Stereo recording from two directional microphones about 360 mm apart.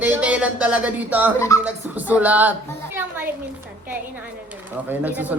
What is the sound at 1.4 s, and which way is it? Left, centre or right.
Speech, centre.